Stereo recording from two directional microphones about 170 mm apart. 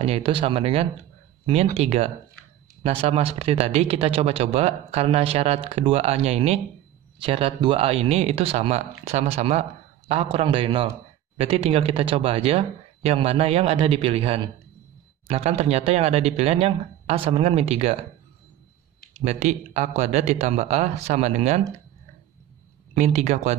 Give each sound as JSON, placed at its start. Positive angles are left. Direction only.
{"t": 0.0, "sound": "speech", "side_deg": -35}
{"t": 19.2, "sound": "speech", "side_deg": -45}
{"t": 22.9, "sound": "speech", "side_deg": -40}